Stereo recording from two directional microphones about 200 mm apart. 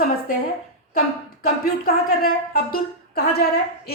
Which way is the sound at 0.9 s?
45° left (ahead or behind).